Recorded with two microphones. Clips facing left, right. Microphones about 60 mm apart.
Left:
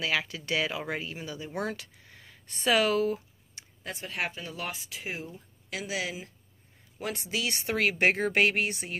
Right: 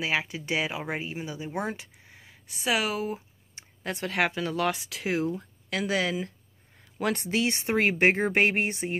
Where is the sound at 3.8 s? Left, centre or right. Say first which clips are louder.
Right 7 dB; right.